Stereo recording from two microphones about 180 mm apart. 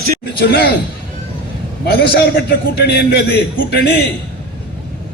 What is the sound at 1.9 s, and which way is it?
A man's voice, 60° left (ahead or behind).